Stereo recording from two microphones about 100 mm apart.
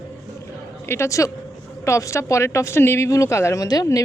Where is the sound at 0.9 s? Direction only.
30° left (ahead or behind).